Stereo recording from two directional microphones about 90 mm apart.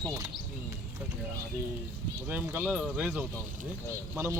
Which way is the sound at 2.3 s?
20° right (ahead or behind).